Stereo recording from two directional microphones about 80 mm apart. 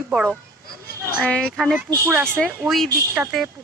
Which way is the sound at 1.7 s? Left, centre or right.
Right.